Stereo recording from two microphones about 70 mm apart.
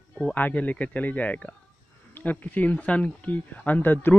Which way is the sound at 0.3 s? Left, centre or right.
Left.